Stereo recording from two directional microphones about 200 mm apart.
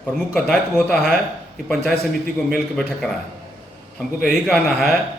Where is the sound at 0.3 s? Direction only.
5° left (ahead or behind).